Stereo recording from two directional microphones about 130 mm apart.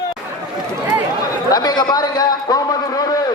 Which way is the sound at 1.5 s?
30° left (ahead or behind).